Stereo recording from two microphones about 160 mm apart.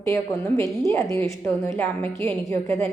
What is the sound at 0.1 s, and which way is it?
A woman's voice, 15° left (ahead or behind).